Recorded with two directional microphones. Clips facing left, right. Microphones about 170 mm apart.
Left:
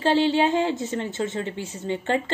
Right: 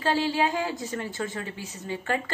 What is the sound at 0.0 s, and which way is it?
A woman's voice, 25° left (ahead or behind).